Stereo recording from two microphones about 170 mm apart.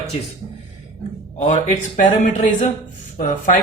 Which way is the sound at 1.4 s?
45° left (ahead or behind).